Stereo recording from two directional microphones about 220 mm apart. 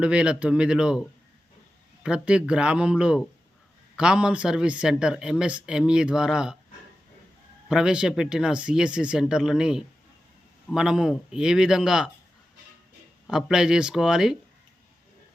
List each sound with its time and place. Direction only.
0.0 s a man's voice: 5° right (ahead or behind)
2.0 s a man's voice: 5° right (ahead or behind)
7.7 s a man's voice: 5° right (ahead or behind)
13.2 s a man's voice: centre (ahead or behind)